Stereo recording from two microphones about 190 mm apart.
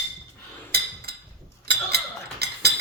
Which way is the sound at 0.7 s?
55° right (ahead or behind).